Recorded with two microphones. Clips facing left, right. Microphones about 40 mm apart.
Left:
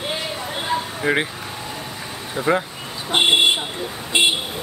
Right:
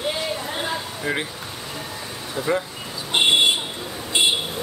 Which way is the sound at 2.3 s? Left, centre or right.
Left.